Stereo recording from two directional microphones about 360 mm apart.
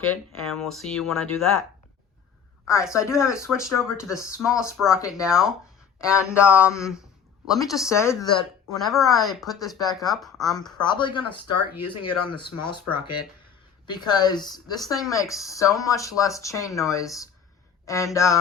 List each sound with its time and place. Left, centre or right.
0.4 s speech: centre
2.9 s speech: centre
5.2 s speech: centre
11.4 s speech: left
13.9 s speech: centre